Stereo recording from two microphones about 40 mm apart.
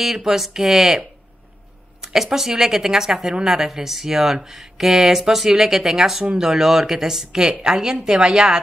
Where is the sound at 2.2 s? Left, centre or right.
Centre.